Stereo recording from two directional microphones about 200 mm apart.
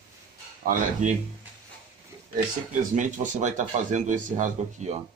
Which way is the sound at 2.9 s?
40° right (ahead or behind).